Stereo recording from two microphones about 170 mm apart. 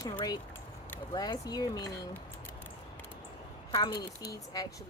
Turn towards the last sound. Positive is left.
turn(degrees=20)  # may be behind; listen again after turning